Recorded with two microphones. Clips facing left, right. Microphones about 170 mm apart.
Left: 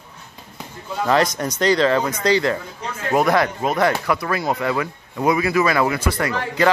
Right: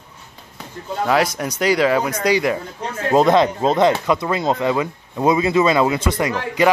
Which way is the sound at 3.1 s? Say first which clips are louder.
Right 4 dB; 25° right (ahead or behind).